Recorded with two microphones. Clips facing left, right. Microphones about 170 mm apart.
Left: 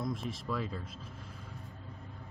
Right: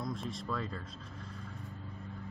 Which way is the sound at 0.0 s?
Centre (ahead or behind).